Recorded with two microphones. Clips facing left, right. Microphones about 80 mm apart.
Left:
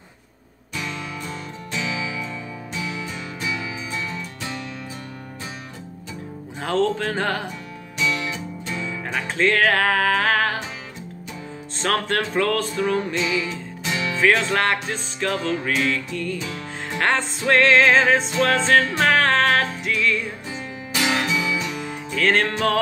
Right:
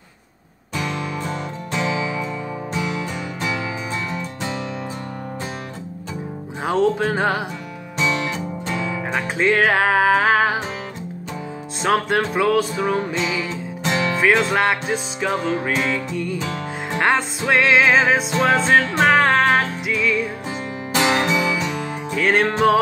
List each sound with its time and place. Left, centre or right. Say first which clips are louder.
0.9 s music: right 6 dB; right
3.3 s music: right 3 dB; right
6.6 s music: right 3 dB; centre
8.0 s music: right 3 dB; right
8.9 s music: right 3 dB; centre
11.8 s music: right 4 dB; centre
13.8 s music: right 5 dB; right
14.2 s music: right 1 dB; centre
16.3 s music: right 4 dB; right
17.0 s music: right 2 dB; centre
20.9 s music: right 4 dB; right
22.1 s music: right 2 dB; centre